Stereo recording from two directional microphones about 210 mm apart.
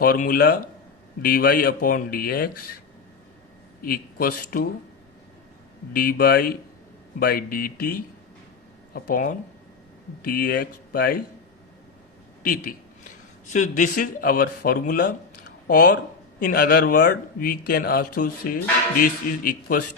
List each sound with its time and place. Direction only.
0.0 s speech: 45° left (ahead or behind)
3.8 s speech: 45° left (ahead or behind)
5.9 s speech: 45° left (ahead or behind)
12.4 s a man's voice: 40° left (ahead or behind)